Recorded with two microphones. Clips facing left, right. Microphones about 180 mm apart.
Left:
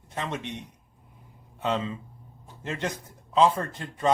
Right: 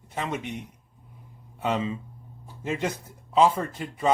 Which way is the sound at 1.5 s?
10° right (ahead or behind).